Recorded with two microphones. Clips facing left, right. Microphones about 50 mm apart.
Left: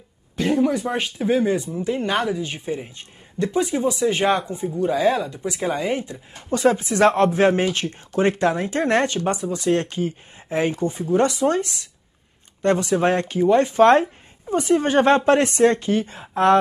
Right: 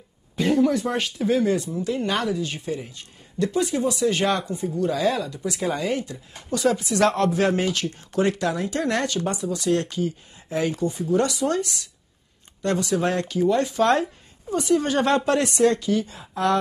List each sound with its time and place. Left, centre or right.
0.6 s speech: centre; by 16.5 s left